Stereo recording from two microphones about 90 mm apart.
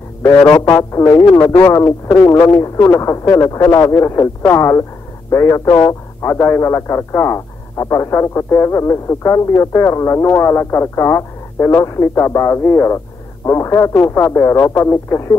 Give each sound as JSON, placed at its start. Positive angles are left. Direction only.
{"t": 0.7, "sound": "a man's voice", "side_deg": 35}
{"t": 1.9, "sound": "a man's voice", "side_deg": 30}
{"t": 3.9, "sound": "a man's voice", "side_deg": 30}